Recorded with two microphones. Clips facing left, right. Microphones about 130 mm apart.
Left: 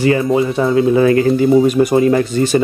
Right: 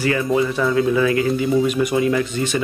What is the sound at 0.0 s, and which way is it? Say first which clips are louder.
Speech: left 5 dB; 25° left (ahead or behind).